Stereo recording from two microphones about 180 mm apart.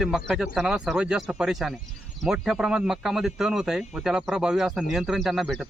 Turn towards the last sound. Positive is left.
turn(degrees=0)  # may be behind; listen again after turning